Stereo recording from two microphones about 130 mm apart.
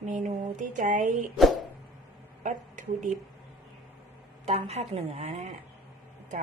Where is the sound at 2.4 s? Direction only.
75° right (ahead or behind).